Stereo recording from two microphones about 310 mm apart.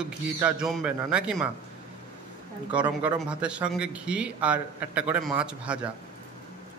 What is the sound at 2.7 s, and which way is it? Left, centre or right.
A man's voice, centre.